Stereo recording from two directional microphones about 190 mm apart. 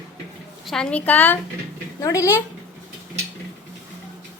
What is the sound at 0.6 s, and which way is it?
A woman's voice, 5° left (ahead or behind).